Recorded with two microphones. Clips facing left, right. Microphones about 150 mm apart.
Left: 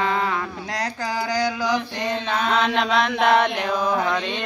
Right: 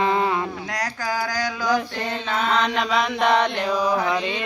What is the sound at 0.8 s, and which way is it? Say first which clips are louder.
Speech: left 1 dB; 20° left (ahead or behind).